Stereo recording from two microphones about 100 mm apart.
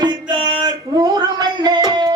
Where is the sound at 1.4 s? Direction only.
45° right (ahead or behind).